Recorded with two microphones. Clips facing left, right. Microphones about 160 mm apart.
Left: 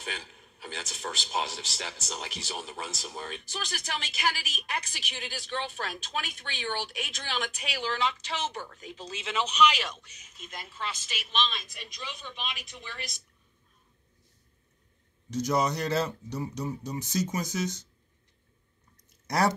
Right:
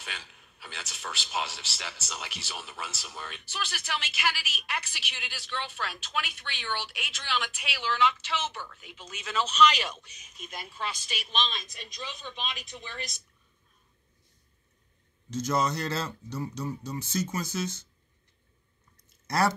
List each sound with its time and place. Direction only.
0.0 s a man's voice: 40° left (ahead or behind); by 9.8 s 15° left (ahead or behind)
9.8 s a woman's voice: 5° right (ahead or behind); by 12.9 s 20° right (ahead or behind)
15.2 s speech: 15° left (ahead or behind)
19.2 s speech: 15° left (ahead or behind)